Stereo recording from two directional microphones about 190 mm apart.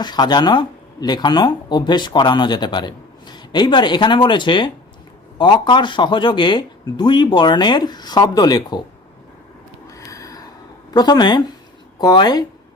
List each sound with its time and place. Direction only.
0.0 s speech: 20° left (ahead or behind)
9.8 s a sound: 15° left (ahead or behind)
10.9 s speech: 20° left (ahead or behind)